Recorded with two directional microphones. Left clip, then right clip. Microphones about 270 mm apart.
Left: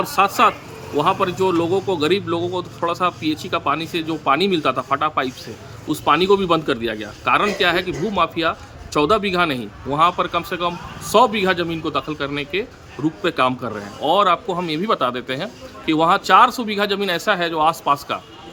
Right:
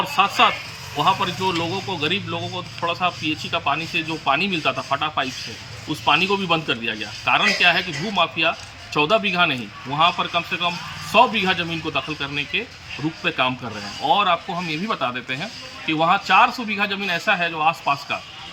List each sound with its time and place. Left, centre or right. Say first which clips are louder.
0.0 s a man's voice: left 2 dB; centre